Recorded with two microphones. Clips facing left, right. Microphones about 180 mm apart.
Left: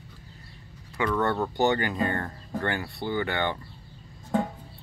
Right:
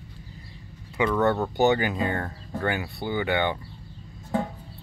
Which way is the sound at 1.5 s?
15° right (ahead or behind).